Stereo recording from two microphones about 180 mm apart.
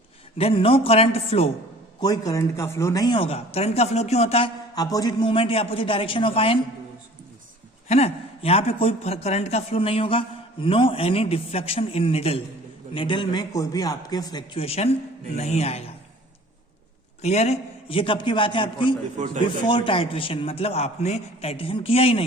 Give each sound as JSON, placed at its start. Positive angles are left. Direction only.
{"t": 0.3, "sound": "a man's voice", "side_deg": 30}
{"t": 2.0, "sound": "speech", "side_deg": 20}
{"t": 7.9, "sound": "a man's voice", "side_deg": 35}
{"t": 17.2, "sound": "a man's voice", "side_deg": 40}